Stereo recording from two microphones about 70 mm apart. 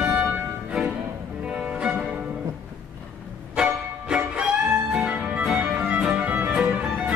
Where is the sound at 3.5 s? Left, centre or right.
Centre.